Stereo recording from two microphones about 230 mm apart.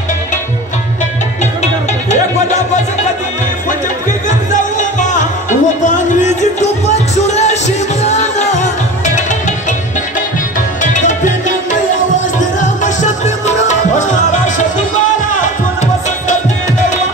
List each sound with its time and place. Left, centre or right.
1.4 s music: left
4.5 s music: left
10.8 s music: left